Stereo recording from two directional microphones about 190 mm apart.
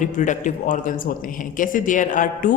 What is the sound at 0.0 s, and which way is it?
A woman's voice, 40° left (ahead or behind).